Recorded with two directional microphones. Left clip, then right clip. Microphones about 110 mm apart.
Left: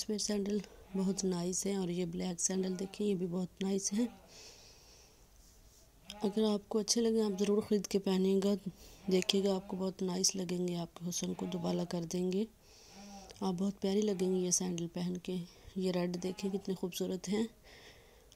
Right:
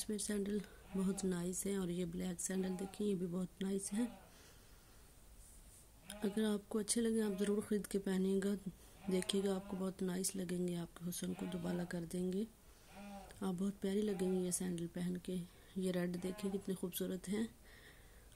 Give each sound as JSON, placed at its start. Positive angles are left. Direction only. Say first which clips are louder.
{"t": 0.0, "sound": "speech", "louder": "left 6 dB", "side_deg": 35}
{"t": 6.0, "sound": "speech", "louder": "left 6 dB", "side_deg": 40}
{"t": 13.3, "sound": "a sound", "louder": "left 7 dB", "side_deg": 40}
{"t": 13.6, "sound": "speech", "louder": "left 5 dB", "side_deg": 30}
{"t": 13.8, "sound": "speech", "louder": "left 6 dB", "side_deg": 45}
{"t": 17.3, "sound": "a sound", "louder": "left 6 dB", "side_deg": 50}